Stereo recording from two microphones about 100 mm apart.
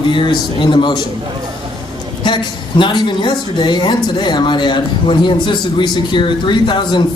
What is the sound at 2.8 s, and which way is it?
Speech, 50° left (ahead or behind).